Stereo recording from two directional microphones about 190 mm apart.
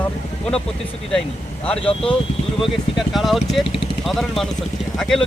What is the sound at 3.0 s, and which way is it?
Speech, centre (ahead or behind).